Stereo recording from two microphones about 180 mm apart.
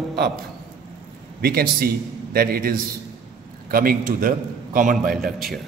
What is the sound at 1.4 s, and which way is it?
A man's voice, 55° right (ahead or behind).